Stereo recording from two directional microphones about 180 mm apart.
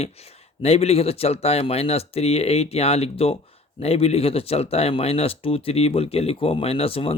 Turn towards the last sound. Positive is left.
turn(degrees=30)  # may be behind; listen again after turning